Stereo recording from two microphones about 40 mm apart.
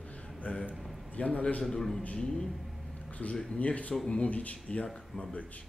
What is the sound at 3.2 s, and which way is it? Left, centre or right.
Speech, left.